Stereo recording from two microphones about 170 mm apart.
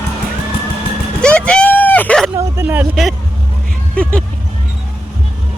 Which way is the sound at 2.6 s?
10° right (ahead or behind).